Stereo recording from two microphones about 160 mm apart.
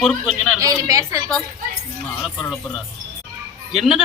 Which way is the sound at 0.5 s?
20° right (ahead or behind).